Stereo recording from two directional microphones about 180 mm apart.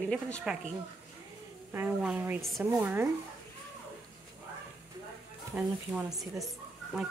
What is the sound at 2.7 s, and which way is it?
Speech, 10° right (ahead or behind).